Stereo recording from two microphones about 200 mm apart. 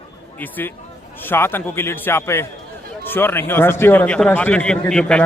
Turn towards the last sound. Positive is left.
turn(degrees=5)  # may be behind; listen again after turning